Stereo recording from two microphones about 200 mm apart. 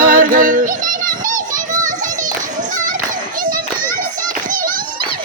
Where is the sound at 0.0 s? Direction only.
40° right (ahead or behind).